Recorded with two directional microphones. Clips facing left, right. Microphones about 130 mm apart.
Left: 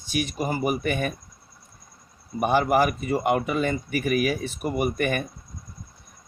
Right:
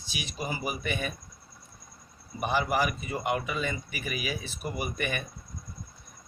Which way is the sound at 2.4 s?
50° left (ahead or behind).